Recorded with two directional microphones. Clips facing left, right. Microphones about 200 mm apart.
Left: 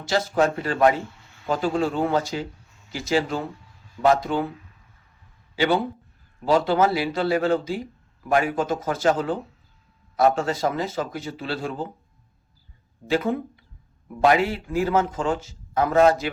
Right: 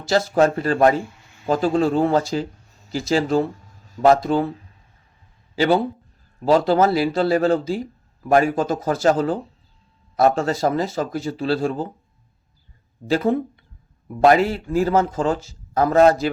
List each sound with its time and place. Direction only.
0.1 s a man's voice: 40° right (ahead or behind)
13.1 s a man's voice: 35° right (ahead or behind)